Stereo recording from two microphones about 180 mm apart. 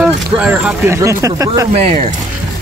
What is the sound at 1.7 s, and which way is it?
Speech, 35° right (ahead or behind).